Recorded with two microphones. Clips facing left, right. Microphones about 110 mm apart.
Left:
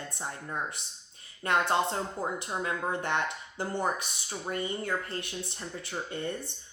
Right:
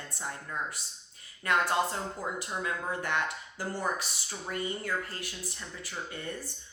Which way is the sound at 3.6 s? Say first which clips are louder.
Left 2 dB; 20° left (ahead or behind).